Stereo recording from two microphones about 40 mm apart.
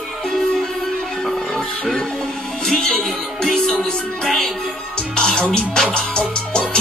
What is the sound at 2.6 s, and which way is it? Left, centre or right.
Music, centre.